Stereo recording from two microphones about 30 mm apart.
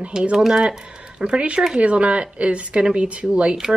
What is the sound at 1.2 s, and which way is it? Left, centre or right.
Speech, right.